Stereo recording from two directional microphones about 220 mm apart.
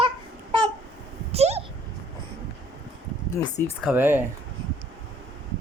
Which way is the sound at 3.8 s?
10° right (ahead or behind).